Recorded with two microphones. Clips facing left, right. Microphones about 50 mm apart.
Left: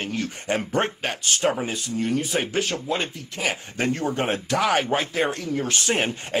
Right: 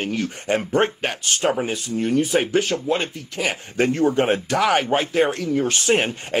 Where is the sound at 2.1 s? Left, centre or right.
Right.